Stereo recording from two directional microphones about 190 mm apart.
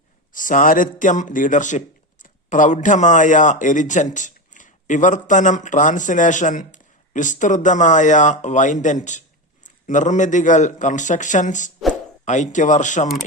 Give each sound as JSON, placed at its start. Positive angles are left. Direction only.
{"t": 0.3, "sound": "a man's voice", "side_deg": 45}